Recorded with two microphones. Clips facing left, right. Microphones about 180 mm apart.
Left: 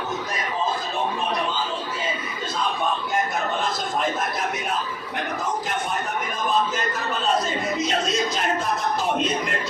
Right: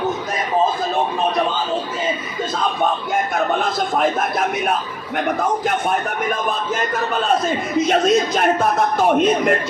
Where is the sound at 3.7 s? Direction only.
55° right (ahead or behind).